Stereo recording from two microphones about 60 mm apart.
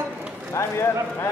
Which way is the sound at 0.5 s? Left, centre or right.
Left.